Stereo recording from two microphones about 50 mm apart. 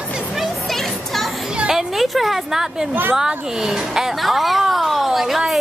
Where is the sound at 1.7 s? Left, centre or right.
Centre.